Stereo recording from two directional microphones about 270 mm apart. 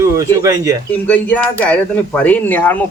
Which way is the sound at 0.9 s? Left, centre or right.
Centre.